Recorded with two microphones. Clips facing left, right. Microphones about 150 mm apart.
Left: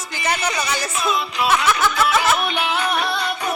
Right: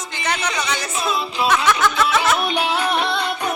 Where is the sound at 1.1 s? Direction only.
30° right (ahead or behind).